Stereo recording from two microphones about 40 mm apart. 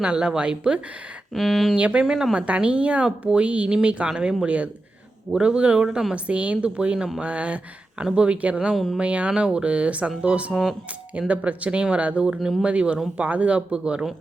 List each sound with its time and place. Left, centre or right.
0.0 s speech: right
1.3 s speech: centre
1.7 s speech: right
4.4 s speech: right
6.2 s speech: right
8.7 s speech: centre
9.0 s speech: right